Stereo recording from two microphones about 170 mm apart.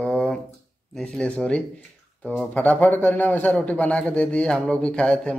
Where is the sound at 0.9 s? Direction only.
5° left (ahead or behind).